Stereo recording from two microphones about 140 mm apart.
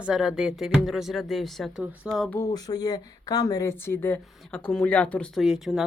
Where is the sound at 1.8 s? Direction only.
10° right (ahead or behind).